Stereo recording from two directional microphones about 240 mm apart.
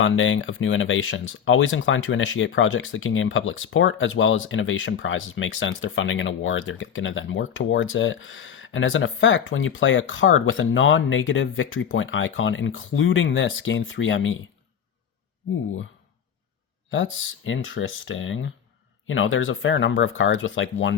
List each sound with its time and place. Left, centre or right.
0.0 s speech: left
16.9 s speech: left